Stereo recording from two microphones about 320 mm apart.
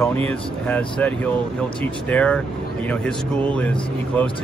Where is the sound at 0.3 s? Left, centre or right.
Centre.